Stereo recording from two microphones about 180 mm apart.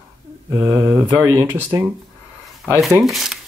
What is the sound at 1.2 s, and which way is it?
Speech, 15° right (ahead or behind).